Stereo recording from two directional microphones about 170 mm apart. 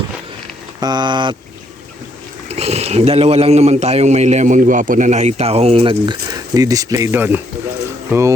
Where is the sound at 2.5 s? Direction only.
40° right (ahead or behind).